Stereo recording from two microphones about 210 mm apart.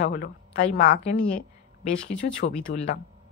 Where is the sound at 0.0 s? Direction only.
35° left (ahead or behind).